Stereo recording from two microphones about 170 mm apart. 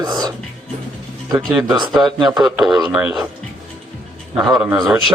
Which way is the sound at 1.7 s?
25° right (ahead or behind).